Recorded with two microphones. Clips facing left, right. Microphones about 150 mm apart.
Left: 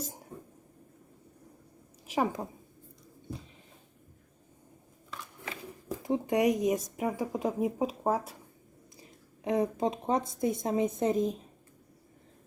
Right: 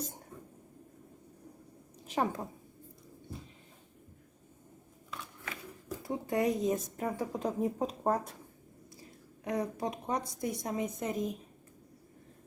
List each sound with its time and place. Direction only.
0.3 s whispering: 25° left (ahead or behind)
2.0 s a woman's voice: 15° left (ahead or behind)
6.0 s speech: 20° left (ahead or behind)
9.0 s a woman's voice: 20° left (ahead or behind)